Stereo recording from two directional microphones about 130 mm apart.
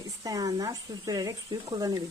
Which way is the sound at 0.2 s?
30° right (ahead or behind).